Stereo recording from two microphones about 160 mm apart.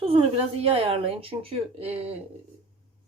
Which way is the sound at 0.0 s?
40° right (ahead or behind).